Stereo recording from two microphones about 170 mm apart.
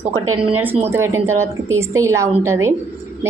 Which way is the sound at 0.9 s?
15° right (ahead or behind).